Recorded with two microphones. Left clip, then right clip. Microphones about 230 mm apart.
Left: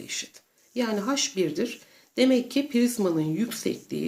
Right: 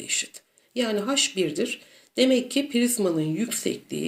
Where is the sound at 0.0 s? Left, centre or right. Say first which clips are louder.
Right 5 dB; centre.